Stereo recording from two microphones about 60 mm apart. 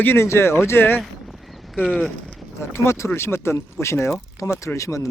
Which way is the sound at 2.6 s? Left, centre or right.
Left.